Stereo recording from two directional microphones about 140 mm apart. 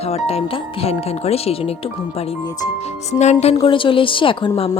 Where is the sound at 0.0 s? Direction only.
45° left (ahead or behind).